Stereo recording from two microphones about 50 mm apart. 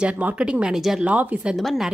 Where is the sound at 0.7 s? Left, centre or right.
Centre.